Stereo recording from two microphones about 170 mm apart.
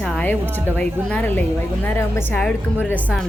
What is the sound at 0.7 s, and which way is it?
A woman's voice, 10° left (ahead or behind).